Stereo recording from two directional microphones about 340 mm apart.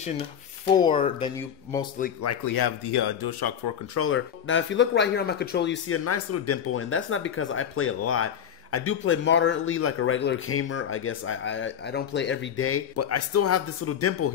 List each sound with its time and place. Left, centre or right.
0.7 s speech: centre
2.5 s speech: left
3.9 s speech: left